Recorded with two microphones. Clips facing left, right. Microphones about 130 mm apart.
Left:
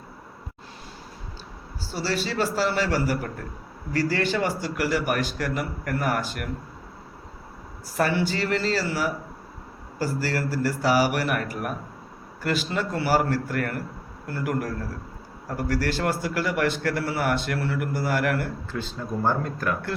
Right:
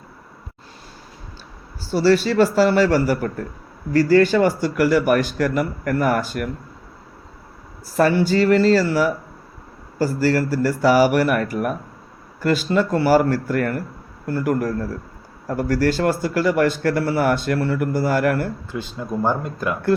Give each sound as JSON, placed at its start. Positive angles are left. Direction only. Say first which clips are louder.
{"t": 1.9, "sound": "speech", "louder": "right 11 dB", "side_deg": -55}
{"t": 7.9, "sound": "a man's voice", "louder": "right 8 dB", "side_deg": -40}
{"t": 18.7, "sound": "speech", "louder": "right 4 dB", "side_deg": -15}